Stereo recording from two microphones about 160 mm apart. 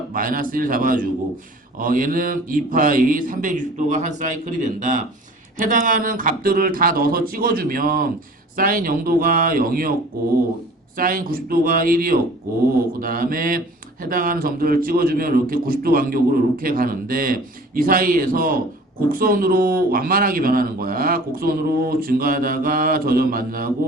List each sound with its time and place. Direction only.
0.1 s a man's voice: 60° right (ahead or behind)
10.9 s a man's voice: 60° right (ahead or behind)